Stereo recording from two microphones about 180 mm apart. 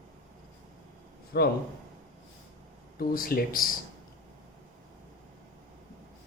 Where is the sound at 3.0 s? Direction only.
55° left (ahead or behind).